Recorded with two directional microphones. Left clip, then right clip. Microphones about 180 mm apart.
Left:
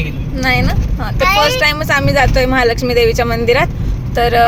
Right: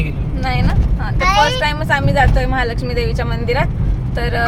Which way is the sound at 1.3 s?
10° left (ahead or behind).